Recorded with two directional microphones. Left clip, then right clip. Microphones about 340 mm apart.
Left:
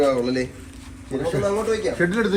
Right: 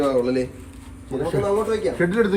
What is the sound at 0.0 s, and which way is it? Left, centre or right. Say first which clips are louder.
A man's voice: even; centre.